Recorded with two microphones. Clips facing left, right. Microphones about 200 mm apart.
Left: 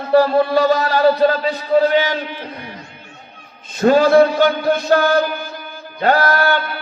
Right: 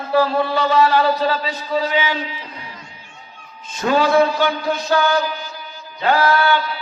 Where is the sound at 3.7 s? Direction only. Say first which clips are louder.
Left 5 dB; 45° left (ahead or behind).